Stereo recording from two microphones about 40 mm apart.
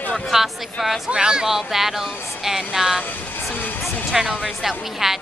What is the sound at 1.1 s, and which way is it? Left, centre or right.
Speech, centre.